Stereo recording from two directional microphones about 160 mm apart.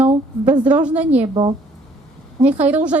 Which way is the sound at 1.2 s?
30° right (ahead or behind).